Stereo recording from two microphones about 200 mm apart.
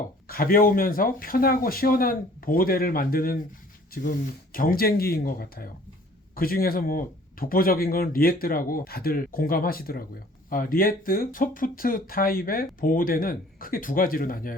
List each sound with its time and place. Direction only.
0.3 s speech: 45° left (ahead or behind)